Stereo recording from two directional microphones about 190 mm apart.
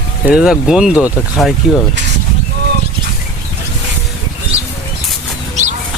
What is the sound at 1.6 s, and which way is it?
Speech, 55° left (ahead or behind).